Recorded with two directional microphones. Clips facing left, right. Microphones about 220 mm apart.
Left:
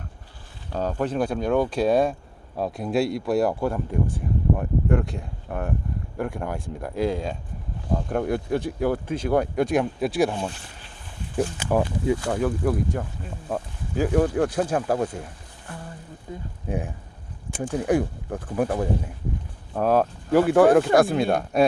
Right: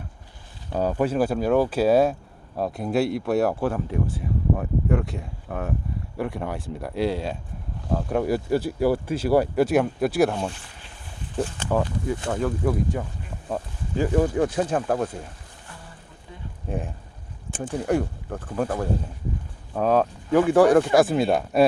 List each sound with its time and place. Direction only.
0.7 s speech: 10° right (ahead or behind)
11.3 s speech: 10° left (ahead or behind)
16.3 s speech: 40° left (ahead or behind)
16.6 s speech: 15° left (ahead or behind)
17.6 s speech: centre (ahead or behind)
17.9 s speech: 10° left (ahead or behind)